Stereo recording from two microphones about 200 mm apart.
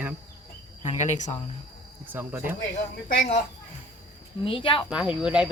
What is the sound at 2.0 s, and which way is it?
Speech, 10° right (ahead or behind).